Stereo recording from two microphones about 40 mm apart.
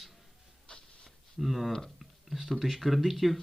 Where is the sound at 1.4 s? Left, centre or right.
Centre.